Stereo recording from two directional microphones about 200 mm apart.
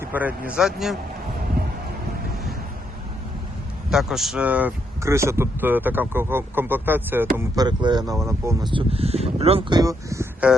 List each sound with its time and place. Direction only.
0.0 s speech: 10° right (ahead or behind)
3.8 s speech: centre (ahead or behind)